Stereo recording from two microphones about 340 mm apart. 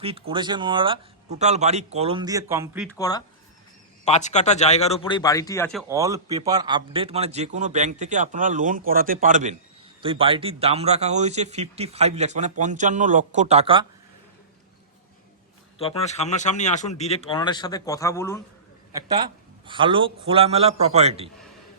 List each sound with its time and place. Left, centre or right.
0.0 s speech: centre
3.0 s speech: centre
5.9 s speech: centre
15.8 s speech: centre
18.9 s speech: centre